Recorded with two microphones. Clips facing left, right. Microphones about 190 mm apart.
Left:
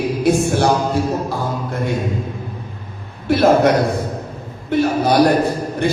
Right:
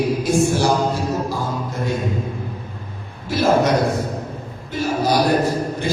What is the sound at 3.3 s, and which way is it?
Mantra, 60° left (ahead or behind).